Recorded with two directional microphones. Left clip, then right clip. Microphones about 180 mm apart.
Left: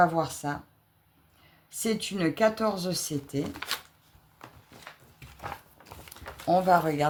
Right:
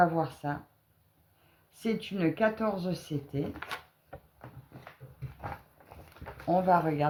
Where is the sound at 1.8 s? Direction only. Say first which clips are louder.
Left 2 dB; 35° left (ahead or behind).